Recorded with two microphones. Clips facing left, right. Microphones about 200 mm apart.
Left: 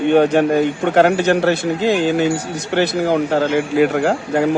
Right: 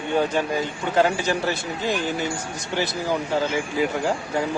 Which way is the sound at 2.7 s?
65° left (ahead or behind).